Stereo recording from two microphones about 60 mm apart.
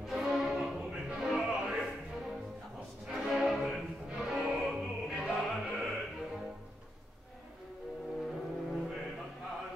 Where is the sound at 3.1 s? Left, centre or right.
Centre.